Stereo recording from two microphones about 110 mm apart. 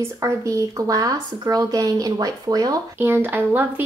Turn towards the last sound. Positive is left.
turn(degrees=-15)  # may be behind; listen again after turning